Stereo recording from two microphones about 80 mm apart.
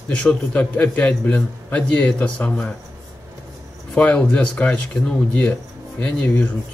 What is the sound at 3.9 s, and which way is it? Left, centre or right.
A man's voice, centre.